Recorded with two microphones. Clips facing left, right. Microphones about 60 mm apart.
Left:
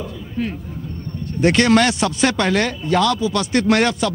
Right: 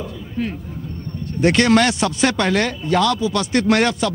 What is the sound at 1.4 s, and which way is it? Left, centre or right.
Speech, centre.